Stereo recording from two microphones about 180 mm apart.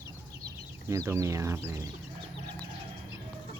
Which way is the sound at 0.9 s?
15° right (ahead or behind).